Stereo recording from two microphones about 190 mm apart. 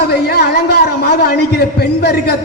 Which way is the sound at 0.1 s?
55° left (ahead or behind).